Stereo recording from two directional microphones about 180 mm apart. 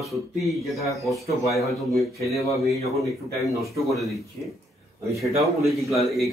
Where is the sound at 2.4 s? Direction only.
15° left (ahead or behind).